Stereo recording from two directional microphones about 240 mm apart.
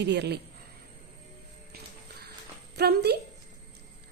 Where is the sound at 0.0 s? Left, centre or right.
Right.